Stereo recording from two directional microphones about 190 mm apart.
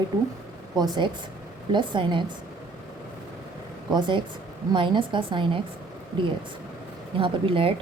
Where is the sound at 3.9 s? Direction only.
25° right (ahead or behind).